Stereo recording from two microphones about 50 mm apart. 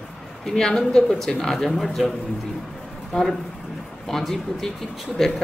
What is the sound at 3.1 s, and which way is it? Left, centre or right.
Speech, centre.